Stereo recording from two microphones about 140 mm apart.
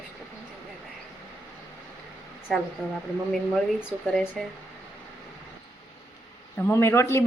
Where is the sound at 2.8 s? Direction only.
5° right (ahead or behind).